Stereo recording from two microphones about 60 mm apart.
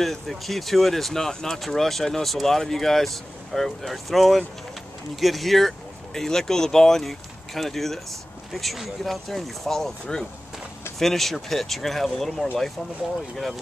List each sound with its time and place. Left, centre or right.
0.0 s speech: centre